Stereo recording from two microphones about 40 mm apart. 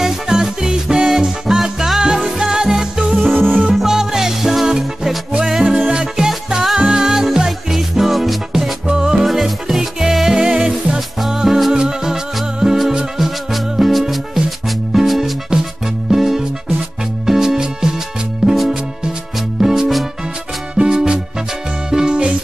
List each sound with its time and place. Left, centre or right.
0.0 s music: centre
3.3 s music: right
3.7 s music: centre
8.8 s music: centre
9.2 s music: centre; by 11.0 s right
11.0 s music: centre
18.5 s music: centre
19.6 s music: centre